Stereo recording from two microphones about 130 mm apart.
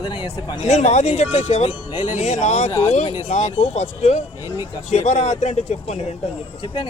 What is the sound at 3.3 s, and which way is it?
Speech, 65° left (ahead or behind).